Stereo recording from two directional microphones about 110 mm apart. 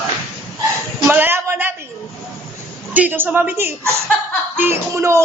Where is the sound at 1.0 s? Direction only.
20° right (ahead or behind).